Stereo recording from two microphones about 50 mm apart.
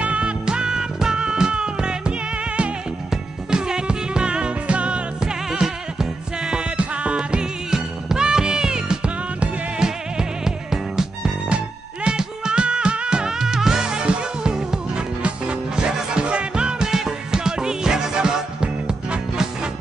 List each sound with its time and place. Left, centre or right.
0.0 s music: right
11.4 s music: right